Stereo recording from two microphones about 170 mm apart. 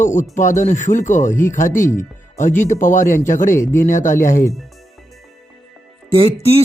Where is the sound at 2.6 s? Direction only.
50° left (ahead or behind).